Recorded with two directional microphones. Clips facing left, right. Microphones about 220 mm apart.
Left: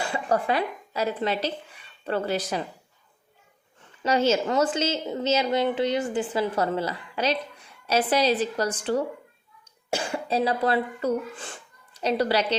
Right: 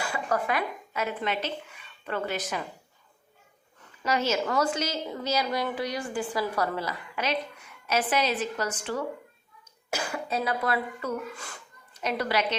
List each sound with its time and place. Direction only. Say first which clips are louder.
0.0 s speech: left 3 dB; 30° left (ahead or behind)
4.0 s a woman's voice: left 5 dB; 30° left (ahead or behind)